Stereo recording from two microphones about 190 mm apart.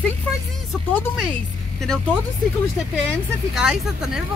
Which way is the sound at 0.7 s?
5° left (ahead or behind).